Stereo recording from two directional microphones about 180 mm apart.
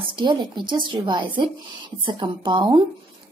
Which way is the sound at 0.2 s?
25° right (ahead or behind).